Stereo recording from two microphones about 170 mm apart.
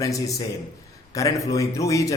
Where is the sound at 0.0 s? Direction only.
20° left (ahead or behind).